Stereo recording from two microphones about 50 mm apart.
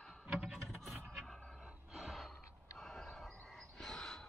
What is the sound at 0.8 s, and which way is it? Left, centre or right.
Vehicle, centre.